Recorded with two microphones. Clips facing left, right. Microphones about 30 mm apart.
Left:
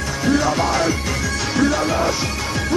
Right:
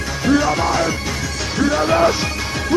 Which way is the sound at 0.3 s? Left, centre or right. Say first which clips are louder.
Right 2 dB; centre.